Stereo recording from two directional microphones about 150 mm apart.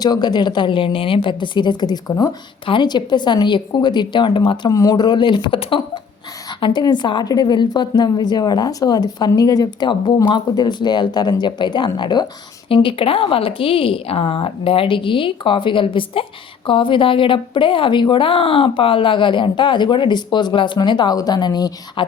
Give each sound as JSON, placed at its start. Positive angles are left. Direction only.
{"t": 0.0, "sound": "a woman's voice", "side_deg": 30}